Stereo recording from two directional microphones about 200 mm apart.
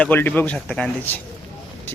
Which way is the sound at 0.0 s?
10° left (ahead or behind).